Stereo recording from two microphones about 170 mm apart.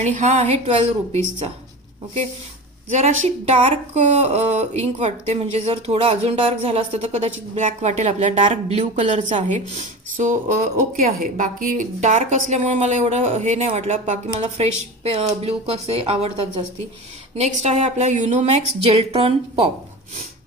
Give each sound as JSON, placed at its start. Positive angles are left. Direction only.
{"t": 0.0, "sound": "a woman's voice", "side_deg": -45}
{"t": 2.9, "sound": "a woman's voice", "side_deg": -40}